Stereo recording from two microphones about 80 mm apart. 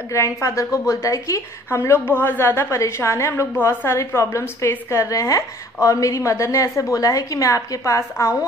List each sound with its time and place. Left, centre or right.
0.1 s a woman's voice: left